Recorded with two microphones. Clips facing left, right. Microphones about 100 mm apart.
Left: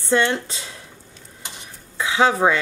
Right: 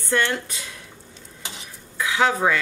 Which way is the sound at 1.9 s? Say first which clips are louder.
Left 3 dB; 25° left (ahead or behind).